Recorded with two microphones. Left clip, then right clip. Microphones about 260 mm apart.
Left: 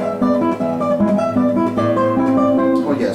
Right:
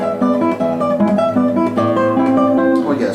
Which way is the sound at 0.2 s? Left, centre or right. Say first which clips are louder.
Right 1 dB; centre.